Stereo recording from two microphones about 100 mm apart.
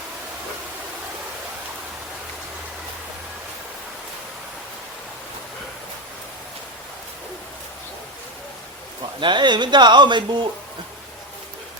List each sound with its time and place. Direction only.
9.2 s a man's voice: 50° right (ahead or behind)